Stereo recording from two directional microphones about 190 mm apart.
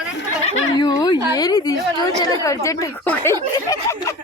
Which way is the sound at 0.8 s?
20° left (ahead or behind).